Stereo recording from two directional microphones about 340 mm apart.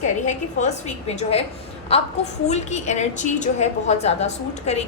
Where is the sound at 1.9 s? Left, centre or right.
Centre.